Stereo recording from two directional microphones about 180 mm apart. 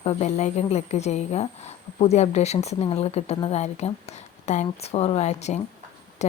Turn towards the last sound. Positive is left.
turn(degrees=40)  # may be behind; listen again after turning